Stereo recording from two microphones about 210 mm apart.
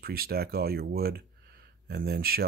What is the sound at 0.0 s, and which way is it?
Speech, 45° right (ahead or behind).